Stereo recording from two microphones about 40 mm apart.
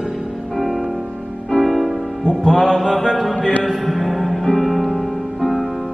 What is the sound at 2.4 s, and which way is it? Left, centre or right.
Mantra, centre.